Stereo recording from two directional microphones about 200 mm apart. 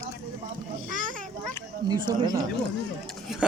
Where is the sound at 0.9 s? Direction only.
40° right (ahead or behind).